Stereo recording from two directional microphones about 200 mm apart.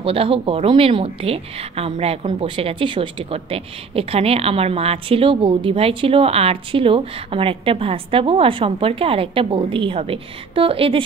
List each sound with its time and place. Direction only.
0.0 s a woman's voice: 30° right (ahead or behind)